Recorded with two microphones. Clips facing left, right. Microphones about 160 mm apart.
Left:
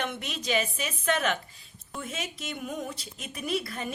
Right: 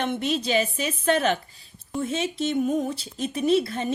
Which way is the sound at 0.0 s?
30° right (ahead or behind).